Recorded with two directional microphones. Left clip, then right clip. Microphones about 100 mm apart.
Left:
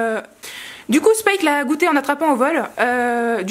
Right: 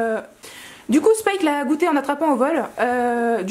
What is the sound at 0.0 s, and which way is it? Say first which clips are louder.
Speech: left 2 dB; 20° left (ahead or behind).